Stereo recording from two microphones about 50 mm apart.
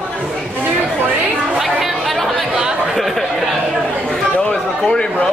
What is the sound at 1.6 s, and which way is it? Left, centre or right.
Chatter, centre.